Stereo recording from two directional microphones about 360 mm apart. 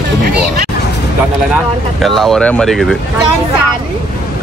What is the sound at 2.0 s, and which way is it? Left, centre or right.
Speech, centre.